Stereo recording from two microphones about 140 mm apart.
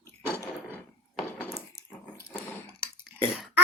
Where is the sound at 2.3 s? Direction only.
15° left (ahead or behind).